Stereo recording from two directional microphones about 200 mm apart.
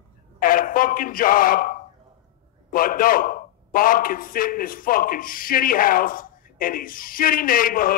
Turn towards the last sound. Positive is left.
turn(degrees=45)  # may be behind; listen again after turning